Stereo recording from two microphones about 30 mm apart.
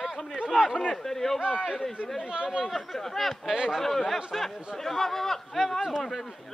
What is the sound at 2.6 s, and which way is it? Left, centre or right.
Speech, centre.